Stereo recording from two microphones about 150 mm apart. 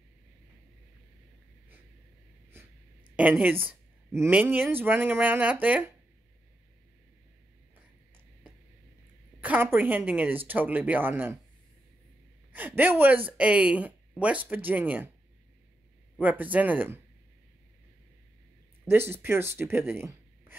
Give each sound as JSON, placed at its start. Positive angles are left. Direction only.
{"t": 3.2, "sound": "a woman's voice", "side_deg": -10}
{"t": 9.4, "sound": "speech", "side_deg": -15}
{"t": 12.5, "sound": "speech", "side_deg": -10}
{"t": 16.2, "sound": "speech", "side_deg": -10}
{"t": 18.9, "sound": "speech", "side_deg": -15}